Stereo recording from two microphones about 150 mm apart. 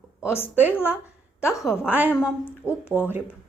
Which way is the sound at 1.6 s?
10° right (ahead or behind).